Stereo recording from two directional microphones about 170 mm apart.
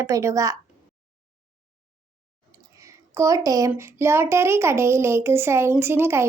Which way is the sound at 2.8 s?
20° right (ahead or behind).